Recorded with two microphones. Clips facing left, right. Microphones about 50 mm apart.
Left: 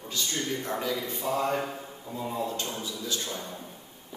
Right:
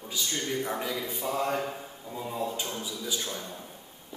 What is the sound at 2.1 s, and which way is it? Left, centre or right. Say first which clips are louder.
A man's voice: left 1 dB; centre.